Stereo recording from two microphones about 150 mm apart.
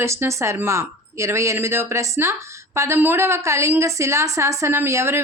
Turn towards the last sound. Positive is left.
turn(degrees=-15)  # may be behind; listen again after turning